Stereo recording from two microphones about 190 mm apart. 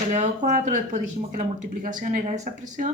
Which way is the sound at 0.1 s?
40° right (ahead or behind).